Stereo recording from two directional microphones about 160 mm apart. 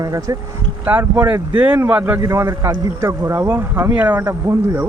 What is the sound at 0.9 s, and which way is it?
Speech, 10° right (ahead or behind).